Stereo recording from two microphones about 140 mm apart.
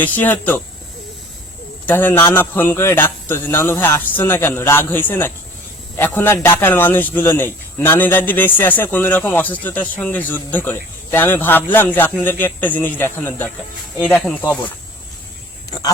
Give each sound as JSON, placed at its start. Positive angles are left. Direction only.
{"t": 0.0, "sound": "a man's voice", "side_deg": 10}
{"t": 1.9, "sound": "a man's voice", "side_deg": 15}